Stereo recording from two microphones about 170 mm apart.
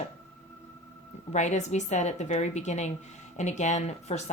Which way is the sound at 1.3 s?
45° left (ahead or behind).